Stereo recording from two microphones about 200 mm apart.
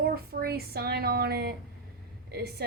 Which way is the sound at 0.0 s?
50° right (ahead or behind).